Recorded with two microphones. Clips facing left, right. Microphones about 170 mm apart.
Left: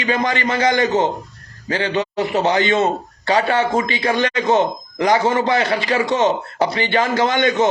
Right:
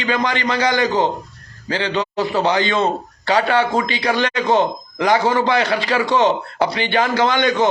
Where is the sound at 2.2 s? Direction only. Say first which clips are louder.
Even; 20° left (ahead or behind).